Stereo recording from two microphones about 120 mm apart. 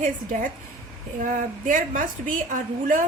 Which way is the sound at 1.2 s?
90° right.